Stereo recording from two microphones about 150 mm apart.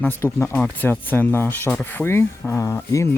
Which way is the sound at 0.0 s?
15° left (ahead or behind).